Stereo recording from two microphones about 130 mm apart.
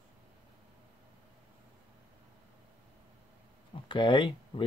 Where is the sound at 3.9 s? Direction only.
40° left (ahead or behind).